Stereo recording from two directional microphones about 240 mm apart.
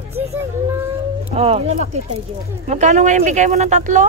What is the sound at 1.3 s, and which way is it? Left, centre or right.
A woman's voice, right.